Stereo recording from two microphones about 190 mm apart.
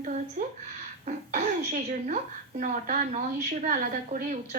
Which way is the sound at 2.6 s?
45° right (ahead or behind).